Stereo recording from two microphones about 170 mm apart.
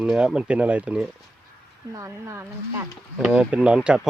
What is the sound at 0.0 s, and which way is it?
Speech, 5° right (ahead or behind).